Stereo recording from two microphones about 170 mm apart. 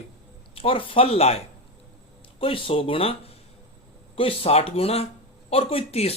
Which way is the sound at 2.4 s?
35° left (ahead or behind).